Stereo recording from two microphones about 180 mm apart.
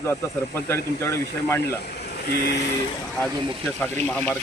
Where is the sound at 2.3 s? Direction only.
60° left (ahead or behind).